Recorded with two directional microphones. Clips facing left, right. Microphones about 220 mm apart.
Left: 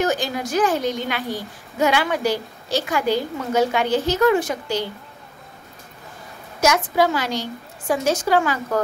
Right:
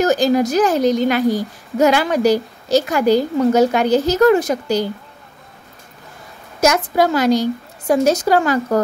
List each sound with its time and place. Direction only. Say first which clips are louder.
0.0 s a woman's voice: right 8 dB; 40° right (ahead or behind)
6.6 s a woman's voice: right 3 dB; 40° right (ahead or behind)